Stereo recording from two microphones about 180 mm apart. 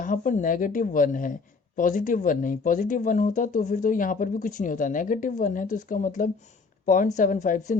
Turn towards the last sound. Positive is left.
turn(degrees=40)  # may be behind; listen again after turning